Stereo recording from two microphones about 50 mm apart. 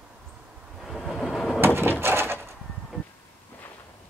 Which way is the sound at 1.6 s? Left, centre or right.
Right.